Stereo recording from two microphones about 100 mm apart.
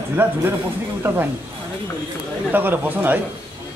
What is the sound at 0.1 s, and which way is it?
Speech, 20° right (ahead or behind).